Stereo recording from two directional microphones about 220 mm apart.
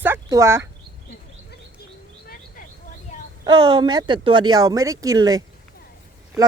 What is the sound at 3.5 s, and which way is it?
Speech, 20° right (ahead or behind).